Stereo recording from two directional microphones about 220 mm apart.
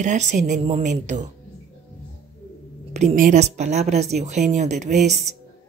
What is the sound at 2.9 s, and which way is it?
Speech, 35° right (ahead or behind).